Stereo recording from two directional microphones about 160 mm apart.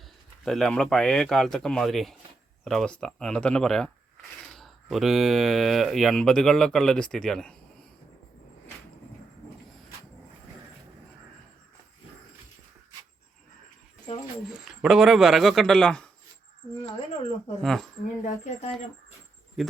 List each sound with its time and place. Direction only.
0.4 s speech: 5° left (ahead or behind)
14.4 s speech: centre (ahead or behind)
17.6 s speech: centre (ahead or behind)
18.0 s speech: 50° left (ahead or behind)